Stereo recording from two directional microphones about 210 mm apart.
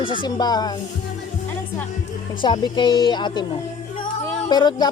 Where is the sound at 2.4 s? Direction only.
25° left (ahead or behind).